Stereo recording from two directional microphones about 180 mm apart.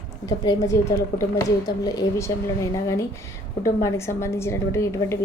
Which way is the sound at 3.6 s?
15° left (ahead or behind).